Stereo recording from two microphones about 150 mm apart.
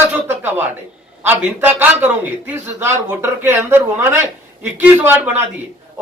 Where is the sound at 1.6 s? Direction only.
10° right (ahead or behind).